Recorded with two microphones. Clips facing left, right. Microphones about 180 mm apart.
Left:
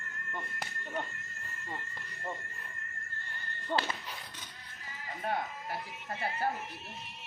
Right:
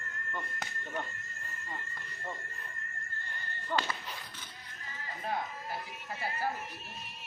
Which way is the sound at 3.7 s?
25° left (ahead or behind).